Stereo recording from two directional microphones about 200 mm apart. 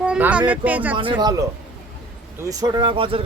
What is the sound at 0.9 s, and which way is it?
Speech, 25° right (ahead or behind).